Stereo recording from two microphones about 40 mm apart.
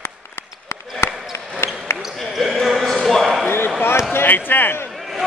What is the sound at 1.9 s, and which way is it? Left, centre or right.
Basketball bounce, left.